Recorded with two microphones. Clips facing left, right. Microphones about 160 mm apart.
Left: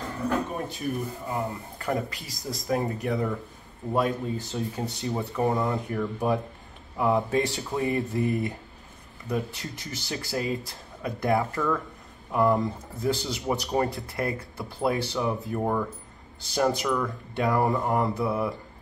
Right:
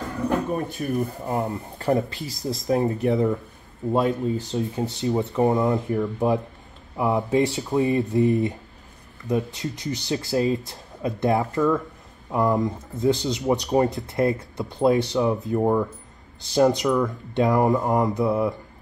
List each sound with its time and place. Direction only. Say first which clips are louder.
0.8 s speech: right 2 dB; 55° right (ahead or behind)
1.3 s speech: right 4 dB; 35° right (ahead or behind); by 18.5 s 20° right (ahead or behind)